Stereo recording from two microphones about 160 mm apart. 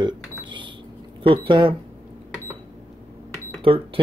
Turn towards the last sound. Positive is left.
turn(degrees=-35)  # may be behind; listen again after turning